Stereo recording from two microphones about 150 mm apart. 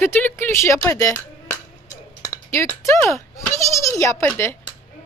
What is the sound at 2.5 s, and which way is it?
A woman's voice, 20° left (ahead or behind).